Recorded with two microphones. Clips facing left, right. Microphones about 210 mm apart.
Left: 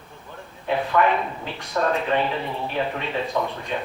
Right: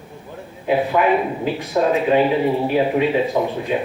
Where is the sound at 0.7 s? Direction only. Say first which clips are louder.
Right 4 dB; 10° right (ahead or behind).